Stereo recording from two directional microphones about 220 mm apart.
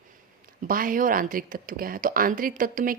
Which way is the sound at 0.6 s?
40° right (ahead or behind).